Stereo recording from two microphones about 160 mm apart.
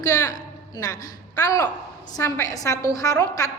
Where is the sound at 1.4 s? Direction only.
20° left (ahead or behind).